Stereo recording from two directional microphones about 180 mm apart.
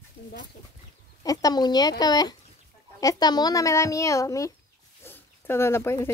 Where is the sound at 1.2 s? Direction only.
20° left (ahead or behind).